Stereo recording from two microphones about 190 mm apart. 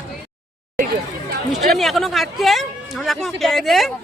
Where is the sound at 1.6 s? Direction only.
Centre (ahead or behind).